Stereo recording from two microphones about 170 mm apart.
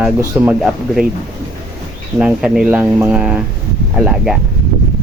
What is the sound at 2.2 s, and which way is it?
Speech, 5° right (ahead or behind).